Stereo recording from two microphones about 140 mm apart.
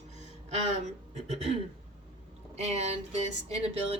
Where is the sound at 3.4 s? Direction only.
45° right (ahead or behind).